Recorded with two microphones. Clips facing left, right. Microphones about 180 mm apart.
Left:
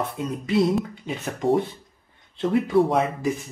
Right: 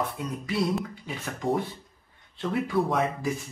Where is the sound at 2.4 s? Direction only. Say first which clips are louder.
Left 7 dB; 25° left (ahead or behind).